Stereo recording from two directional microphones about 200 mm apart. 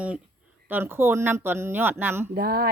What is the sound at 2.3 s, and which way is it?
Speech, 50° right (ahead or behind).